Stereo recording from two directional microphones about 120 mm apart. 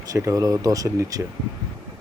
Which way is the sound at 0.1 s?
25° right (ahead or behind).